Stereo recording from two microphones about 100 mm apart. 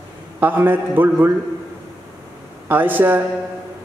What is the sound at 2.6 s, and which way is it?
Speech, 20° right (ahead or behind).